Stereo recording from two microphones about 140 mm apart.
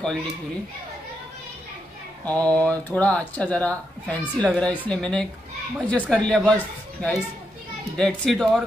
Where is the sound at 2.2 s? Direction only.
10° left (ahead or behind).